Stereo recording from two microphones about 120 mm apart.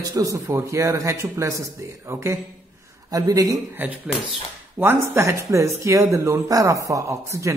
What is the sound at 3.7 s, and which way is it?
A man's voice, 15° right (ahead or behind).